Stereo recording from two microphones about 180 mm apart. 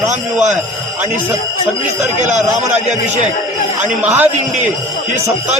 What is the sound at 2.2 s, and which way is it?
Speech, 40° right (ahead or behind).